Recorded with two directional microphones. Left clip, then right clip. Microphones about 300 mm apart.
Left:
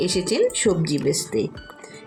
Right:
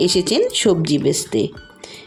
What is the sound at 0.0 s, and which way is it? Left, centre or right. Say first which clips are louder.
Speech: right 4 dB; right.